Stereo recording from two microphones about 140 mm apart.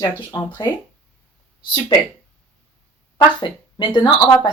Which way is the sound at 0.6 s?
30° left (ahead or behind).